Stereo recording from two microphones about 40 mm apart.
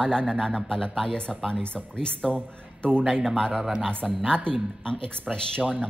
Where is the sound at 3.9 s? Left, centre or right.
Left.